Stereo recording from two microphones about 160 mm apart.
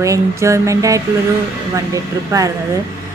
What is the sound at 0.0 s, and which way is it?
A woman's voice, 20° right (ahead or behind).